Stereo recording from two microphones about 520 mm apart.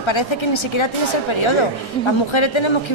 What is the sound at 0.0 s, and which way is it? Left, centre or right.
Speech, left.